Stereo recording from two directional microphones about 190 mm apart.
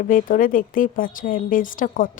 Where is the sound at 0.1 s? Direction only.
45° left (ahead or behind).